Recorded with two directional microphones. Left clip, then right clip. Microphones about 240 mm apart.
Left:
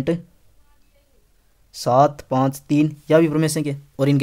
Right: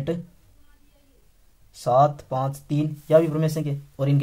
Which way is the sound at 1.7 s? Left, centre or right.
Left.